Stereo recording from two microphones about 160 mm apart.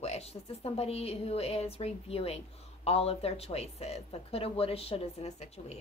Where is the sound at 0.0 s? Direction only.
40° left (ahead or behind).